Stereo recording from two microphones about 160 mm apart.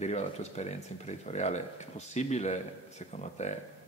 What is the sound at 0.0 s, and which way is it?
A man's voice, 45° left (ahead or behind).